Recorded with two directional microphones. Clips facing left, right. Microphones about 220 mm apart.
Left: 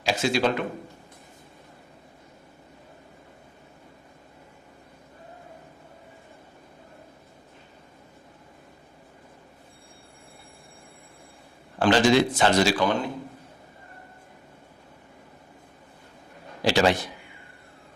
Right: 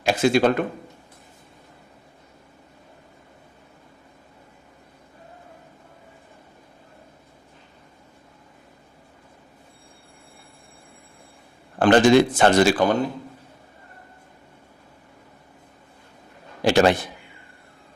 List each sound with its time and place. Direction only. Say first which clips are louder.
0.0 s speech: right 5 dB; 55° right (ahead or behind)
11.8 s speech: right 5 dB; 50° right (ahead or behind)
16.6 s speech: right 4 dB; 50° right (ahead or behind)